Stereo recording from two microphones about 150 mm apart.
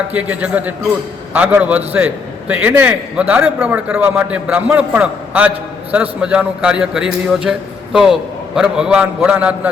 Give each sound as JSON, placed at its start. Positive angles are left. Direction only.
{"t": 0.1, "sound": "a man's voice", "side_deg": -10}